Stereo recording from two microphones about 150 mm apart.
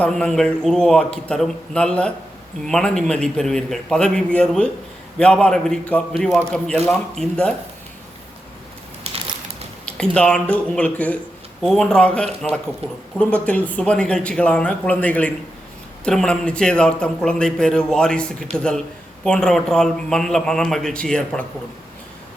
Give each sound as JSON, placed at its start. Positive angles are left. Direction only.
{"t": 0.0, "sound": "a man's voice", "side_deg": 5}
{"t": 9.8, "sound": "a man's voice", "side_deg": 5}
{"t": 12.8, "sound": "speech", "side_deg": -40}
{"t": 13.1, "sound": "a man's voice", "side_deg": 10}